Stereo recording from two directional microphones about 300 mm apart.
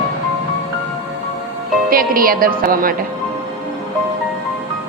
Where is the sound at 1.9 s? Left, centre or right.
Right.